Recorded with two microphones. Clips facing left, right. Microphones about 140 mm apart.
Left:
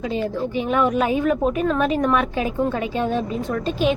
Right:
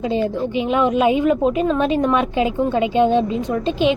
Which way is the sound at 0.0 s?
25° right (ahead or behind).